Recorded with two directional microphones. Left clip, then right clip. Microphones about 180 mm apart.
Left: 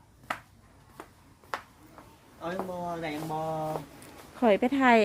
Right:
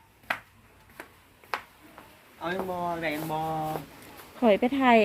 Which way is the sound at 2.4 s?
15° left (ahead or behind).